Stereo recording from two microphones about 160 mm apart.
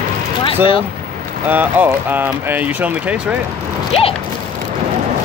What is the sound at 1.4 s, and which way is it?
Speech, 10° right (ahead or behind).